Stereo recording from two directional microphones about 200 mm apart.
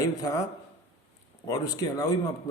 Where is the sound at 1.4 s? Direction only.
20° left (ahead or behind).